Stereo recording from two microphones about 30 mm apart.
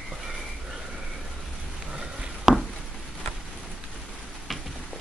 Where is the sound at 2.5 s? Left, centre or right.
Right.